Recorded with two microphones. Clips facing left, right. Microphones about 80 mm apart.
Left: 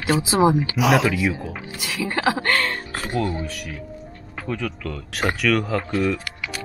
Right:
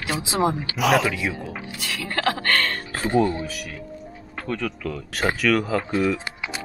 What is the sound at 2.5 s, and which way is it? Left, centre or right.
Speech, centre.